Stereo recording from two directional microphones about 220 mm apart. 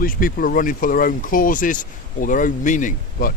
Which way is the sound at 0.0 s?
40° left (ahead or behind).